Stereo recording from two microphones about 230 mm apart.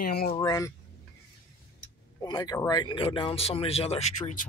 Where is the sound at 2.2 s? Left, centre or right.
Centre.